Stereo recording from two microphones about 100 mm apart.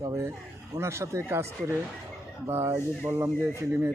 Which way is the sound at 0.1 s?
25° right (ahead or behind).